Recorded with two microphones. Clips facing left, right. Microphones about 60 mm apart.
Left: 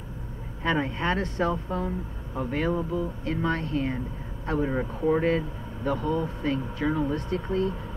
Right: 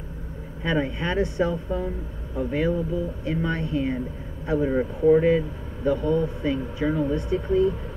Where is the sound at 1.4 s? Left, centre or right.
Left.